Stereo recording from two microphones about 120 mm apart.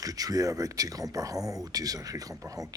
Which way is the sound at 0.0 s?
30° right (ahead or behind).